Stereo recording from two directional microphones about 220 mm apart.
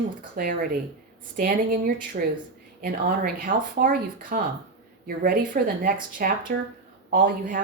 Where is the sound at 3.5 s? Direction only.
40° right (ahead or behind).